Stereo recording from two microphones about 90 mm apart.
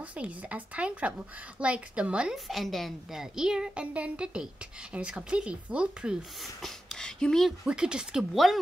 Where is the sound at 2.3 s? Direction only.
Centre (ahead or behind).